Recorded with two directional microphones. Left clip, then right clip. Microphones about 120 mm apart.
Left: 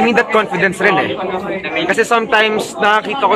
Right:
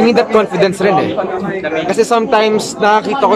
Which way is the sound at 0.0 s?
35° right (ahead or behind).